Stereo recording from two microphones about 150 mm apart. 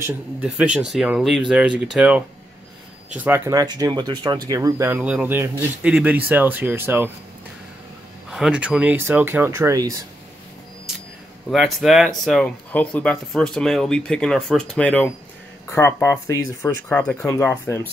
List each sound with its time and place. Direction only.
0.0 s speech: 10° right (ahead or behind)
3.3 s speech: 15° right (ahead or behind)
8.3 s speech: 5° right (ahead or behind); by 9.9 s 20° right (ahead or behind)
11.5 s speech: centre (ahead or behind)
15.7 s speech: 20° left (ahead or behind)
16.9 s speech: 10° left (ahead or behind)